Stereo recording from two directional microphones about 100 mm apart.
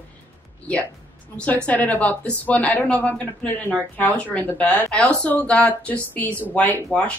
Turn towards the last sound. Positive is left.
turn(degrees=15)  # may be behind; listen again after turning